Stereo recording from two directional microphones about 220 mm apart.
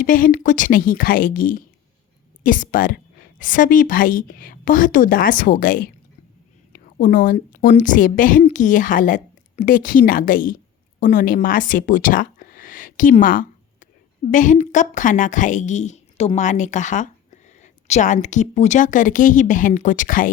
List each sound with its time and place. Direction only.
0.0 s a woman's voice: 40° left (ahead or behind)